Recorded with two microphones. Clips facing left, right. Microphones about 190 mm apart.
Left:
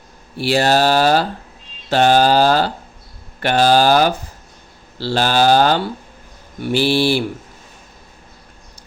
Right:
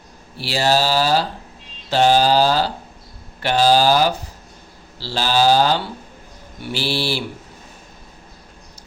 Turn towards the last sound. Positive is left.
turn(degrees=50)  # may be behind; listen again after turning